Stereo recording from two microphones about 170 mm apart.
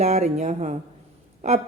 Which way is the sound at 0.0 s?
40° right (ahead or behind).